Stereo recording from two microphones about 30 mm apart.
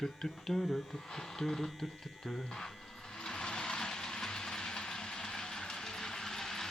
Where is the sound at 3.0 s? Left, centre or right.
Left.